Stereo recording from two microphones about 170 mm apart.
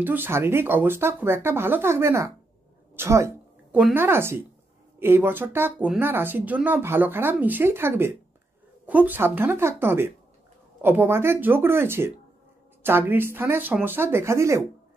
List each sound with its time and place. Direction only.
0.0 s speech: 10° right (ahead or behind)